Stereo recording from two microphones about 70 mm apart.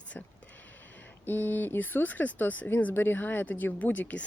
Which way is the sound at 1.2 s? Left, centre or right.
Left.